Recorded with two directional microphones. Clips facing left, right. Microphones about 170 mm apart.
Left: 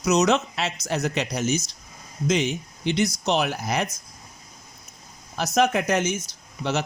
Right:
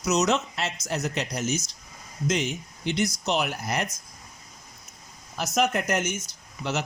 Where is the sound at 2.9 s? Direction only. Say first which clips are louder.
Left 3 dB; 85° left.